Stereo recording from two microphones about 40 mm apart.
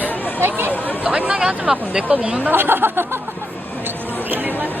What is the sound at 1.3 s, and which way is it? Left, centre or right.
Speech, centre.